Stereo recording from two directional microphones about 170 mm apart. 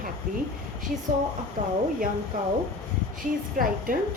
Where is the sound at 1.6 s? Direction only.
45° right (ahead or behind).